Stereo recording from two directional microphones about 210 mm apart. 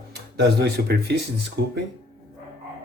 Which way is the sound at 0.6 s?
50° right (ahead or behind).